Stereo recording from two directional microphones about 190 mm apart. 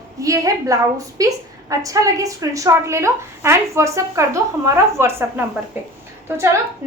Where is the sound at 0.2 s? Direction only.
15° right (ahead or behind).